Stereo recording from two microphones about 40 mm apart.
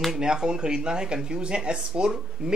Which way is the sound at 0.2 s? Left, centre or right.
Centre.